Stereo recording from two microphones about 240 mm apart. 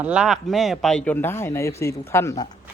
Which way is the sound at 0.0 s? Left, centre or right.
Centre.